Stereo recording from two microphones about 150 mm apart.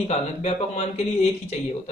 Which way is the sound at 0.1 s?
45° left (ahead or behind).